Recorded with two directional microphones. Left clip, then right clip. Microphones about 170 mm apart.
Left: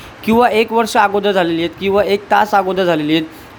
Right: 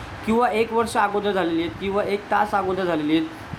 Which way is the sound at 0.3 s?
45° left (ahead or behind).